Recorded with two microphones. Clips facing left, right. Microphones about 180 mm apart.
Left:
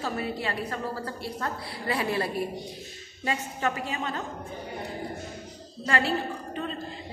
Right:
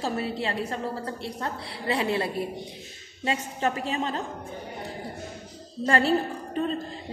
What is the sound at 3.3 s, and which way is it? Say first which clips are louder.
Speech: right 2 dB; 30° right (ahead or behind).